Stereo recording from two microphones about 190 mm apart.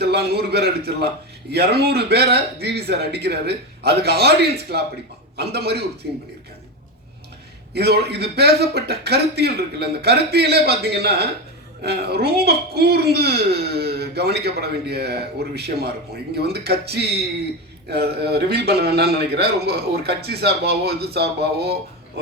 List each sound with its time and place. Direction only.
0.0 s speech: 55° right (ahead or behind)
7.7 s speech: 60° right (ahead or behind)